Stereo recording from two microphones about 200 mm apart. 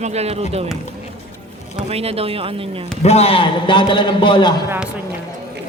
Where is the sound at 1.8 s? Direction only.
30° right (ahead or behind).